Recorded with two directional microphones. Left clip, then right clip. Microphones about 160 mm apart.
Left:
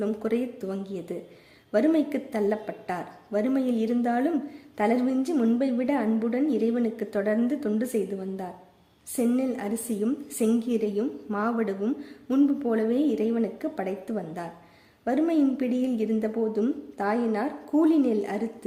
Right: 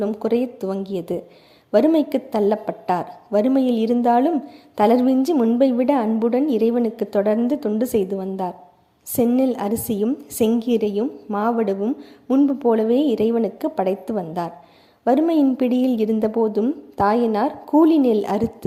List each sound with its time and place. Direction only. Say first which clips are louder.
0.0 s a woman's voice: right 7 dB; 30° right (ahead or behind)
5.2 s a woman's voice: right 8 dB; 25° right (ahead or behind)